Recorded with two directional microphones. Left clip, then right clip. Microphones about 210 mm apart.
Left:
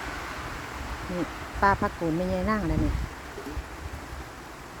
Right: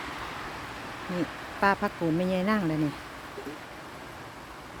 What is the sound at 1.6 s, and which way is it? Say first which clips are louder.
Speech: left 2 dB; 10° right (ahead or behind).